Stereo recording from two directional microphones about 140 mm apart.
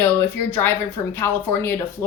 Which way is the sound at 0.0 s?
15° left (ahead or behind).